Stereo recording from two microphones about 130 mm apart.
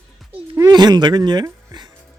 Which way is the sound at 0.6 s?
30° right (ahead or behind).